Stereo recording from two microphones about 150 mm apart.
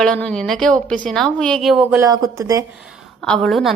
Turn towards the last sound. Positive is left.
turn(degrees=0)  # may be behind; listen again after turning